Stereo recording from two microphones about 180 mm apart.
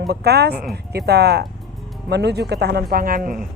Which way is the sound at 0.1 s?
65° right (ahead or behind).